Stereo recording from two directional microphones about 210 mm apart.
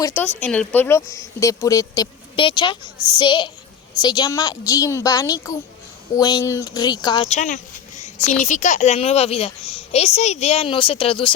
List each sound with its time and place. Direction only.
0.0 s a child's voice: 10° left (ahead or behind)